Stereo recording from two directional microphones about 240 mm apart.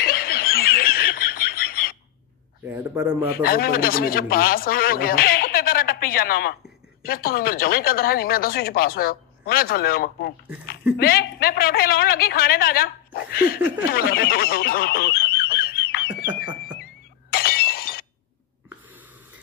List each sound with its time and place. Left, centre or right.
0.0 s snicker: left
2.7 s speech: centre
3.3 s speech: left
13.8 s fowl: left
17.3 s shatter: left